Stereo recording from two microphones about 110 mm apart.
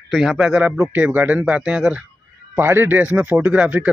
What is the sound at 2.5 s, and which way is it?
Speech, 20° right (ahead or behind).